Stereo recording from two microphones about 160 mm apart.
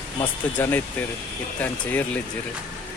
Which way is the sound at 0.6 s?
15° left (ahead or behind).